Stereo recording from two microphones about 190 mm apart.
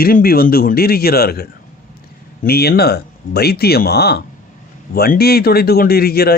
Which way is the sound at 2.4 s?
55° left (ahead or behind).